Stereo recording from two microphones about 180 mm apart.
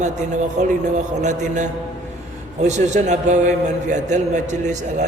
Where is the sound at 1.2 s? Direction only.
40° right (ahead or behind).